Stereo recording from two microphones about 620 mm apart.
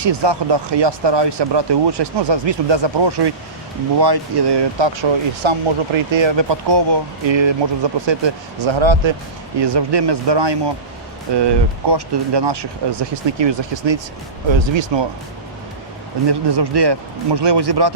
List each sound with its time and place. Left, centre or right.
0.0 s speech: right
16.2 s speech: right